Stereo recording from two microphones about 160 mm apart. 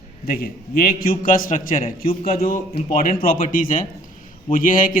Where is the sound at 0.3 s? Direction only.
65° left (ahead or behind).